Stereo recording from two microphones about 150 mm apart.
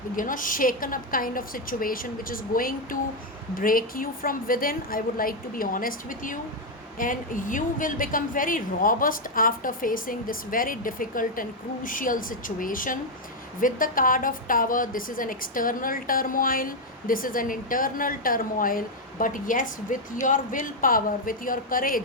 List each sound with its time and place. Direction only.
0.2 s a woman's voice: 65° left (ahead or behind)